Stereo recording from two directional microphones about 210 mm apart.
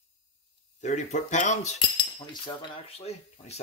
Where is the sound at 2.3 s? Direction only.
20° left (ahead or behind).